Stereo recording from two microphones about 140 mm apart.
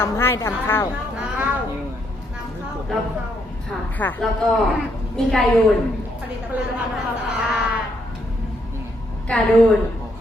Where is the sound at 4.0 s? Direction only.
10° left (ahead or behind).